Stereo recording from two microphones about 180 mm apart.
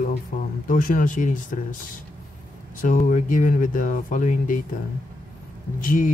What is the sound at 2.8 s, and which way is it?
Speech, 45° left (ahead or behind).